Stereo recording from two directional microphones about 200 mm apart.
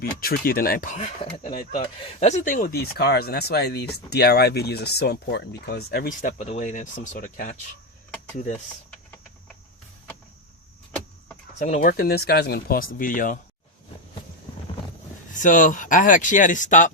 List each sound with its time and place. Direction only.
0.0 s speech: 50° left (ahead or behind)
1.8 s speech: 30° left (ahead or behind)
11.6 s speech: 40° left (ahead or behind)
15.3 s speech: 40° left (ahead or behind)